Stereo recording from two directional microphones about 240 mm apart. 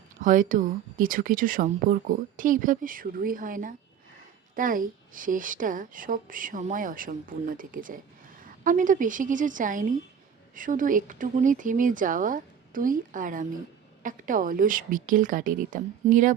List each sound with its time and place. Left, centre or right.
0.2 s speech: right